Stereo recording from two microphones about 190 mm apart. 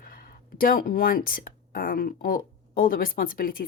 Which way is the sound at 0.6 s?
50° left (ahead or behind).